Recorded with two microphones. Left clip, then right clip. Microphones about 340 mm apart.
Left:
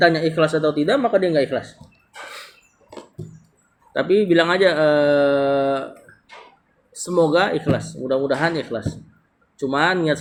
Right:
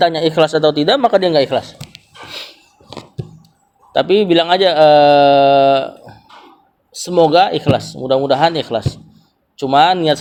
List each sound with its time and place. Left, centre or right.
0.0 s speech: right
3.9 s speech: centre
7.0 s speech: centre
9.6 s speech: centre